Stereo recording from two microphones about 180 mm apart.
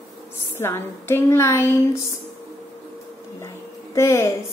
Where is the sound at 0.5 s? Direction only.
15° left (ahead or behind).